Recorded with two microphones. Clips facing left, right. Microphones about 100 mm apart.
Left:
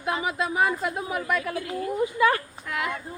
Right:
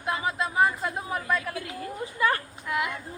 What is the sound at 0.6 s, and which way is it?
Speech, 30° right (ahead or behind).